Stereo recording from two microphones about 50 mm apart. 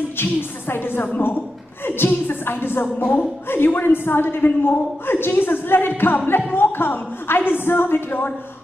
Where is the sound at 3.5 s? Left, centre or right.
Left.